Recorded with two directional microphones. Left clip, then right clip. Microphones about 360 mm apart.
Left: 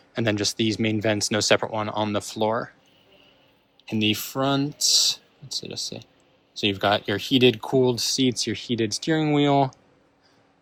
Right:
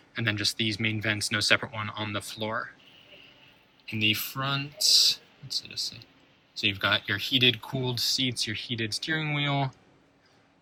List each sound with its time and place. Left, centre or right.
0.1 s speech: centre
3.8 s speech: centre
5.6 s speech: centre